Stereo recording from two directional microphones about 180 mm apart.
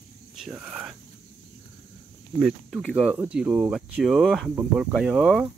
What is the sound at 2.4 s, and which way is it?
Speech, centre (ahead or behind).